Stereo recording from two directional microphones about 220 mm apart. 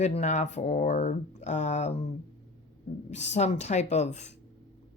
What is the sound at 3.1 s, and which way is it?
Speech, 30° left (ahead or behind).